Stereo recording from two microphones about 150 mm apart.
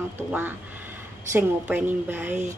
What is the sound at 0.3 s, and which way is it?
A woman's voice, 10° right (ahead or behind).